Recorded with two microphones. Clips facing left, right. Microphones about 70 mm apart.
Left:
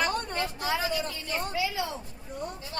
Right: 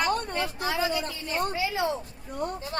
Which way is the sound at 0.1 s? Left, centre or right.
Right.